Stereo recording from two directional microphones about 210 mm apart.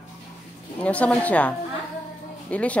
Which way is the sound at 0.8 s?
5° left (ahead or behind).